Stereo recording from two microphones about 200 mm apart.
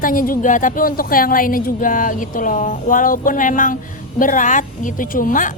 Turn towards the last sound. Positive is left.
turn(degrees=40)  # may be behind; listen again after turning